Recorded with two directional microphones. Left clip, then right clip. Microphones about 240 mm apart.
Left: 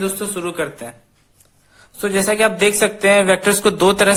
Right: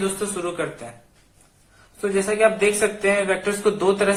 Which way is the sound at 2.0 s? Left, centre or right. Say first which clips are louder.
Left 3 dB; left.